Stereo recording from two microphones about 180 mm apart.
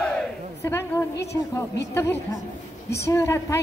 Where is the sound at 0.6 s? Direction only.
15° left (ahead or behind).